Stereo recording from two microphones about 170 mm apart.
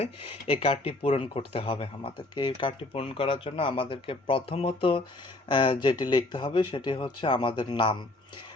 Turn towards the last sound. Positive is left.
turn(degrees=30)  # may be behind; listen again after turning